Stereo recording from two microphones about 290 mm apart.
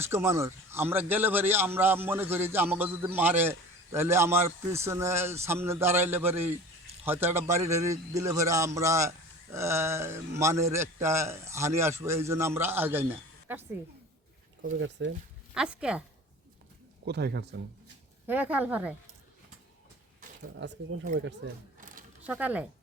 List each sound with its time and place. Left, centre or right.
0.0 s a man's voice: centre
14.8 s speech: right
15.5 s a woman's voice: centre
17.1 s speech: right
18.3 s a woman's voice: centre
20.6 s speech: right
21.8 s a sound: right
22.3 s a woman's voice: centre